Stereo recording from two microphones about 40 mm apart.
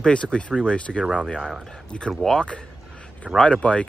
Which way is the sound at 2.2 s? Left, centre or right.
Centre.